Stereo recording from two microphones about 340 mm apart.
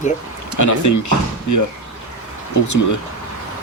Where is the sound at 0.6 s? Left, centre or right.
Left.